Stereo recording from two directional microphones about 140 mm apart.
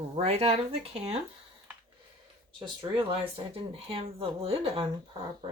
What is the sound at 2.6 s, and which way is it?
Speech, 35° right (ahead or behind).